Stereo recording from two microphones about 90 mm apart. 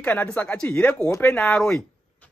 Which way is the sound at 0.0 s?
15° left (ahead or behind).